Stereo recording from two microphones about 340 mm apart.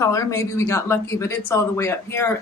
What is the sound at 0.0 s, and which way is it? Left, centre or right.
Speech, centre.